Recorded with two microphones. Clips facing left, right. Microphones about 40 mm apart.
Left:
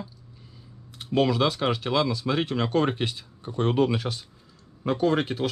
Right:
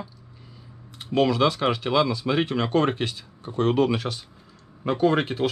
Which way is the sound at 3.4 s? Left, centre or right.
Right.